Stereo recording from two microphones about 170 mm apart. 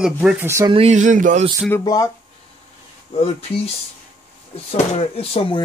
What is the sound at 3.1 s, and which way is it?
Speech, 35° left (ahead or behind).